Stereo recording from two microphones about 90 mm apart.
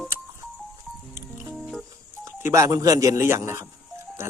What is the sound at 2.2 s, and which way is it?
Speech, 35° right (ahead or behind).